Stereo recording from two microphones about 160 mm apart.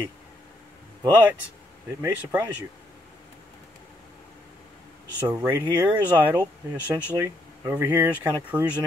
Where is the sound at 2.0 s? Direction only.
20° right (ahead or behind).